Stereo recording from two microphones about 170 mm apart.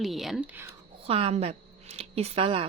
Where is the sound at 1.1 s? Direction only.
35° right (ahead or behind).